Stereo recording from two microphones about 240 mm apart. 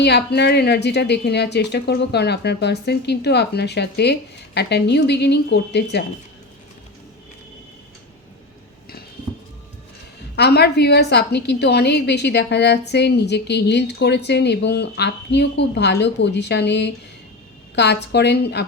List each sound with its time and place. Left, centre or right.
0.0 s a woman's voice: left
10.3 s a woman's voice: left